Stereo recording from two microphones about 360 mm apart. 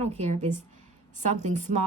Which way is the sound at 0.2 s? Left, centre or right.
Centre.